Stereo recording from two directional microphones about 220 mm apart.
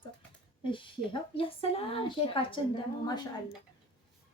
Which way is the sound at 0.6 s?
20° left (ahead or behind).